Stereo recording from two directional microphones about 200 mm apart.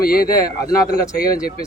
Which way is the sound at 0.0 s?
45° left (ahead or behind).